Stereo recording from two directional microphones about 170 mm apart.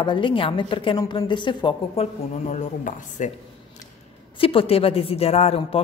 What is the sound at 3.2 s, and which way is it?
Speech, 45° left (ahead or behind).